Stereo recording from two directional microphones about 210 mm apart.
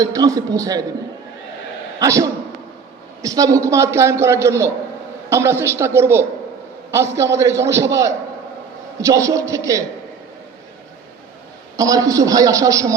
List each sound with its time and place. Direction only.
0.0 s a man's voice: 15° right (ahead or behind)
2.0 s a man's voice: 15° right (ahead or behind)
11.8 s a man's voice: 15° right (ahead or behind)